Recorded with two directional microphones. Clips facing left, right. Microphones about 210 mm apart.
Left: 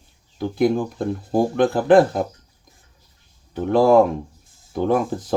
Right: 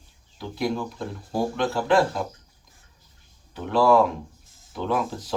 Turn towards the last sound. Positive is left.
turn(degrees=50)  # may be behind; listen again after turning